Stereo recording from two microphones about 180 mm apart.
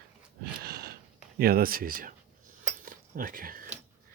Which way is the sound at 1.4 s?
55° right (ahead or behind).